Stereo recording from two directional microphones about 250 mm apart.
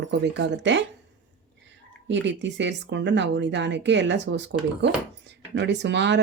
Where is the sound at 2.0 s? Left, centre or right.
Right.